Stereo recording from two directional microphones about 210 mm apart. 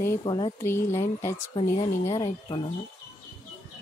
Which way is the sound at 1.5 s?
25° left (ahead or behind).